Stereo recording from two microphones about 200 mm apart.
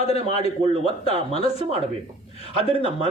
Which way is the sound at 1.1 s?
25° right (ahead or behind).